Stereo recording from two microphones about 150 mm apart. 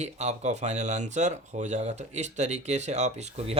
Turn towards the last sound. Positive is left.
turn(degrees=-45)  # may be behind; listen again after turning